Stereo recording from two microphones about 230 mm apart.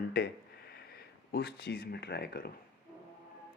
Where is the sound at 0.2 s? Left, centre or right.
Left.